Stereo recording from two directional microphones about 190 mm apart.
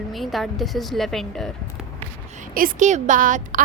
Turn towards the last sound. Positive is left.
turn(degrees=-45)  # may be behind; listen again after turning